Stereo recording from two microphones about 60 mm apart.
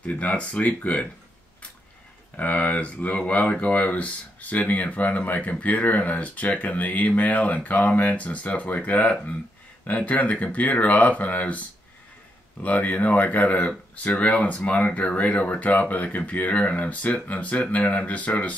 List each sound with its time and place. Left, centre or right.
0.0 s speech: left
2.3 s speech: left
12.6 s speech: left